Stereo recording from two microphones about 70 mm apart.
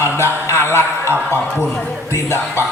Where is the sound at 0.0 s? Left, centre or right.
Left.